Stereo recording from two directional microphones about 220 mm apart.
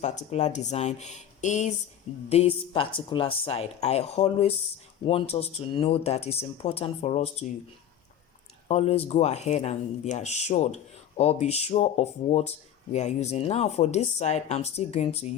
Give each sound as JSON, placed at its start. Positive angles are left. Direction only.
{"t": 0.0, "sound": "speech", "side_deg": 30}
{"t": 8.6, "sound": "speech", "side_deg": 25}